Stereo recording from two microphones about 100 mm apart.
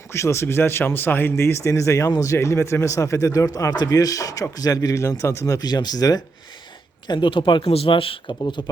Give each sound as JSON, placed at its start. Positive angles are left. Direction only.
{"t": 0.1, "sound": "speech", "side_deg": 30}
{"t": 7.1, "sound": "speech", "side_deg": 55}
{"t": 7.7, "sound": "speech", "side_deg": 70}
{"t": 8.4, "sound": "speech", "side_deg": 45}